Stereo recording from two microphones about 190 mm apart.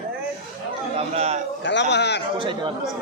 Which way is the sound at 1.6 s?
65° left (ahead or behind).